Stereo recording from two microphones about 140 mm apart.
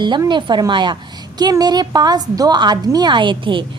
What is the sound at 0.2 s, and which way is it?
A woman's voice, 35° right (ahead or behind).